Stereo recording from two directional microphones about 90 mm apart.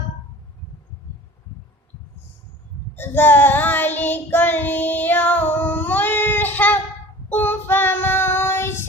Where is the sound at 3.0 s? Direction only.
20° left (ahead or behind).